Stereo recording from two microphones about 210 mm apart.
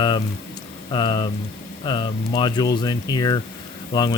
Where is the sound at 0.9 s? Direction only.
20° left (ahead or behind).